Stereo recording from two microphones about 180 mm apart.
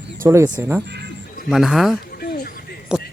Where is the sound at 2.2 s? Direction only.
55° left (ahead or behind).